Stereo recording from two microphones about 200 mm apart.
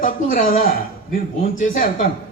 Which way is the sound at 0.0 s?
45° left (ahead or behind).